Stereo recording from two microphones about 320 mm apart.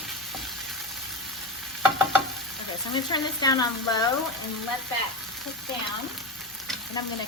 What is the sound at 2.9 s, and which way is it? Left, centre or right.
Speech, centre.